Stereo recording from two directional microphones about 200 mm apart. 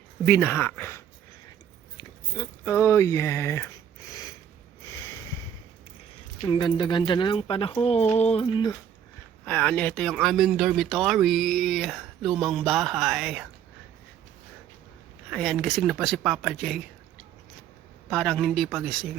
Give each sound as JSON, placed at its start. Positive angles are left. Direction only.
{"t": 0.3, "sound": "speech", "side_deg": 10}
{"t": 6.5, "sound": "speech", "side_deg": 20}
{"t": 9.4, "sound": "speech", "side_deg": 5}
{"t": 15.3, "sound": "speech", "side_deg": 0}
{"t": 18.1, "sound": "speech", "side_deg": 5}